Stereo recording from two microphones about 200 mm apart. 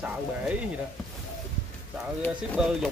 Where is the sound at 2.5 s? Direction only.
5° right (ahead or behind).